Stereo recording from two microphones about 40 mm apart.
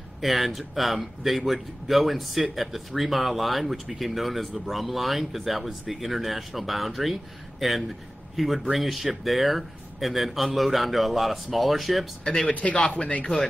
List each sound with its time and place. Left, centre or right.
0.2 s a man's voice: centre
12.4 s speech: left